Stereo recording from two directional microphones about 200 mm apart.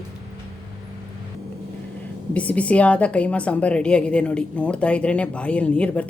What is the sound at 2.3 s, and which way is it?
A woman's voice, 5° left (ahead or behind).